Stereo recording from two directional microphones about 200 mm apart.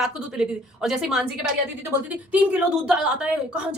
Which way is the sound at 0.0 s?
5° right (ahead or behind).